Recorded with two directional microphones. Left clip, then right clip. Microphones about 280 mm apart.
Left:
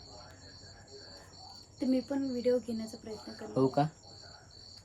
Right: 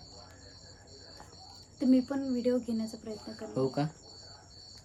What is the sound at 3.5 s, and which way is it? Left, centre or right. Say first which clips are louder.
Speech: left 3 dB; centre.